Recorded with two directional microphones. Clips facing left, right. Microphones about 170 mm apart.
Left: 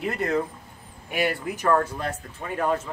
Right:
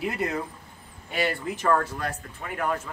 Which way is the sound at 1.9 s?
25° left (ahead or behind).